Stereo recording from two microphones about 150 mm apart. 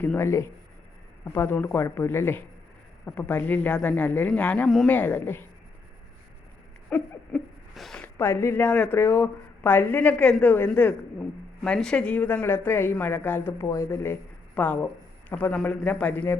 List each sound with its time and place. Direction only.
0.0 s a woman's voice: 15° left (ahead or behind)
6.9 s a woman's voice: 5° left (ahead or behind)